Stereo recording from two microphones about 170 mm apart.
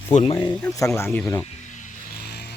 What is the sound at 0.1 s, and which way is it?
Speech, 40° left (ahead or behind).